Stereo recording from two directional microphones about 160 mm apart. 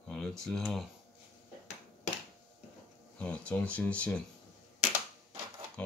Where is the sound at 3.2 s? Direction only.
10° left (ahead or behind).